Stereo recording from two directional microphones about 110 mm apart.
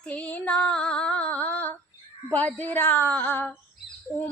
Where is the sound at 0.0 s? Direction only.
15° left (ahead or behind).